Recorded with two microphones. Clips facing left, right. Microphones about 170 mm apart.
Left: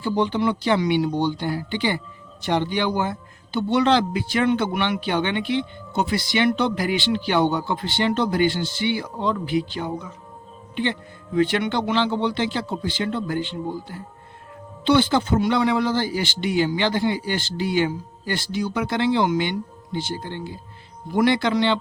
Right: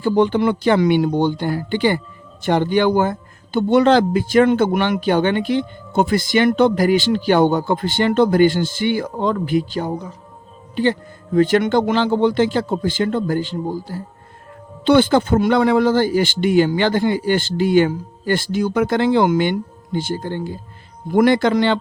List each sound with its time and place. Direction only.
0.0 s a man's voice: 50° right (ahead or behind)
14.8 s a man's voice: 50° right (ahead or behind)